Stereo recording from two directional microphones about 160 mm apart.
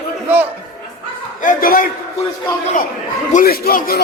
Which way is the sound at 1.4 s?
60° left (ahead or behind).